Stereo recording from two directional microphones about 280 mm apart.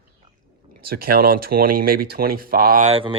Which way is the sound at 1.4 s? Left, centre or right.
Right.